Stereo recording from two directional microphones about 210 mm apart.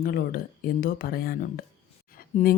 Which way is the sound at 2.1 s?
45° left (ahead or behind).